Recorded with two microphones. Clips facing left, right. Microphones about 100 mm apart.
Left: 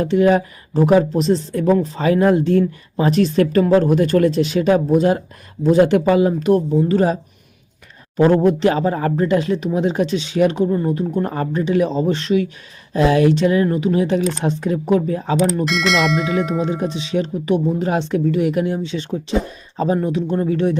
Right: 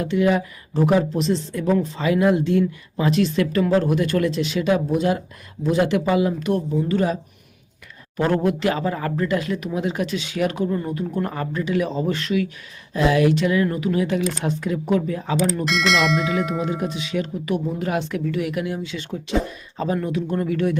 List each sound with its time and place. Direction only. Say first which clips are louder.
0.0 s speech: left 5 dB; 40° left (ahead or behind)
15.6 s speech: left 2 dB; centre (ahead or behind)
16.5 s speech: left 4 dB; 30° left (ahead or behind)